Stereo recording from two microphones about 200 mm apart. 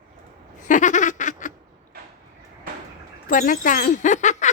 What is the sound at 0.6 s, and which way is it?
Giggle, 40° left (ahead or behind).